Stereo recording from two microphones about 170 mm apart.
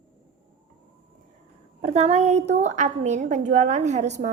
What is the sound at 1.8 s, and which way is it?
A woman's voice, 40° right (ahead or behind).